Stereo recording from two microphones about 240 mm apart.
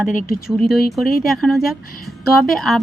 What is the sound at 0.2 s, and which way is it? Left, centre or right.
Speech, left.